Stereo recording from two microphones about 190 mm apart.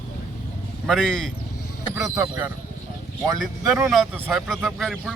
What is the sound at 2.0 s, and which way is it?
Speech, 15° right (ahead or behind).